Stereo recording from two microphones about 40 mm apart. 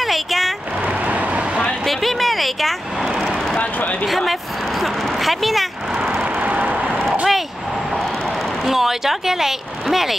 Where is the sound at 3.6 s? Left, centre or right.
Left.